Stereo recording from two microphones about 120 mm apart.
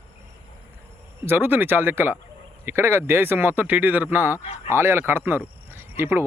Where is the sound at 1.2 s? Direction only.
15° right (ahead or behind).